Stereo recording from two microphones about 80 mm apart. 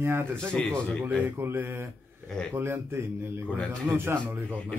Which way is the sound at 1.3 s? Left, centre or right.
Right.